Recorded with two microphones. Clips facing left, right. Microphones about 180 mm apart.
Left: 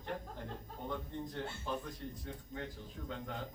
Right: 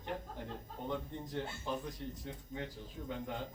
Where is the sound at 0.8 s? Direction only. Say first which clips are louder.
Right 1 dB; 20° right (ahead or behind).